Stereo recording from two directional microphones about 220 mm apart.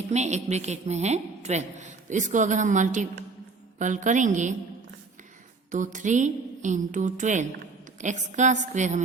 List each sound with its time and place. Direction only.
0.1 s a woman's voice: 30° right (ahead or behind)
5.7 s a woman's voice: 35° right (ahead or behind)